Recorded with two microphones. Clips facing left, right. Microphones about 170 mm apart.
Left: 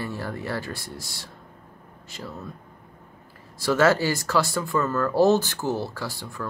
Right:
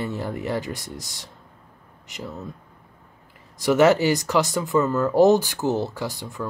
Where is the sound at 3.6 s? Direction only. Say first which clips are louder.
Right 3 dB; 20° right (ahead or behind).